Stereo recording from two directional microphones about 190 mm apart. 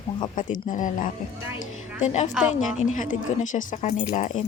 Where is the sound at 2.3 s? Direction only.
5° right (ahead or behind).